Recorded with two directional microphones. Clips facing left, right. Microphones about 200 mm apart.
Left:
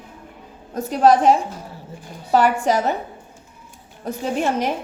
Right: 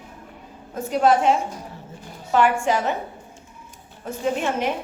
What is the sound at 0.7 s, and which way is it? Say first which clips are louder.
Speech: left 3 dB; 35° left (ahead or behind).